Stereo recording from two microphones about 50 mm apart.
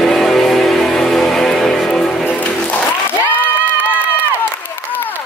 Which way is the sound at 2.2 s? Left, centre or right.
Left.